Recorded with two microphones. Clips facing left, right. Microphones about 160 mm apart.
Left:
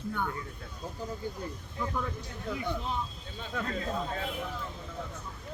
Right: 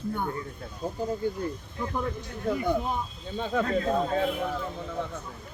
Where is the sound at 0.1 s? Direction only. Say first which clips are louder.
Right 2 dB; 35° right (ahead or behind).